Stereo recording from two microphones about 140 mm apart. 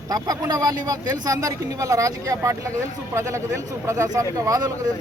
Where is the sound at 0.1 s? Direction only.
25° right (ahead or behind).